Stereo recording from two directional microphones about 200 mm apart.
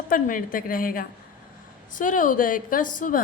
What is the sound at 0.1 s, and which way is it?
A woman's voice, 45° left (ahead or behind).